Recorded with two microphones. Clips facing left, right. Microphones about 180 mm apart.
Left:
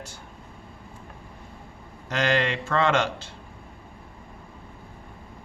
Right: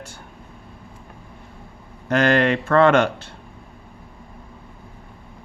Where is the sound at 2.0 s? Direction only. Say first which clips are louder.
Right 7 dB; 55° right (ahead or behind).